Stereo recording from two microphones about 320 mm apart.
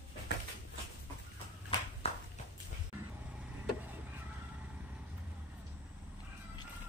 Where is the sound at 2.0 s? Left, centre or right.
Centre.